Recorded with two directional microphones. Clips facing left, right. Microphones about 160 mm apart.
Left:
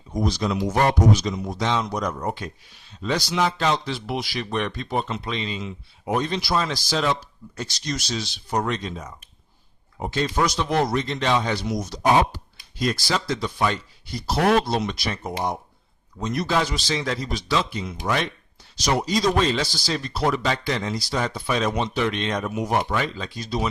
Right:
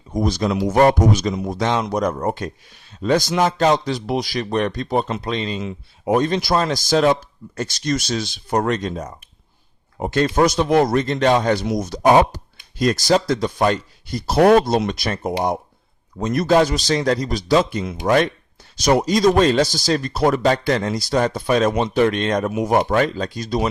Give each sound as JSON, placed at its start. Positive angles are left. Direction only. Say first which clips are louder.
{"t": 0.1, "sound": "a man's voice", "louder": "right 4 dB", "side_deg": -50}